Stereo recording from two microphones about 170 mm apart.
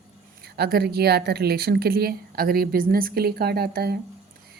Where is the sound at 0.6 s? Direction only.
65° right (ahead or behind).